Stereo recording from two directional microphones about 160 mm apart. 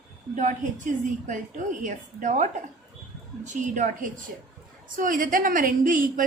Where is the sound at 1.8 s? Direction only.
50° right (ahead or behind).